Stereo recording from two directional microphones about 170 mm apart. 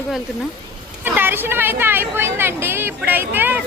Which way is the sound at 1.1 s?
10° right (ahead or behind).